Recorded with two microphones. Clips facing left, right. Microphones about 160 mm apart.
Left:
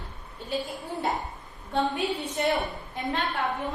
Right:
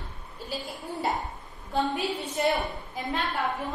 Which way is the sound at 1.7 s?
Centre (ahead or behind).